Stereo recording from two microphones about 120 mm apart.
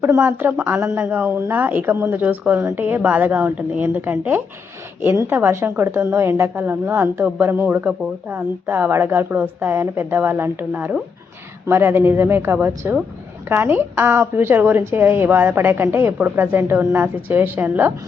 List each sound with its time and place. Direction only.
0.0 s a woman's voice: 20° right (ahead or behind)